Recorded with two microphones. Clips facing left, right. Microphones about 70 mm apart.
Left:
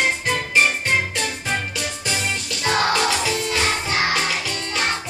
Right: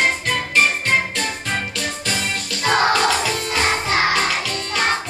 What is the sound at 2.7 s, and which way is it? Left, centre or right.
Music, right.